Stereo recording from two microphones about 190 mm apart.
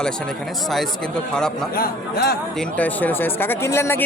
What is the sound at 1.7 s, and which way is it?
Speech, 55° left (ahead or behind).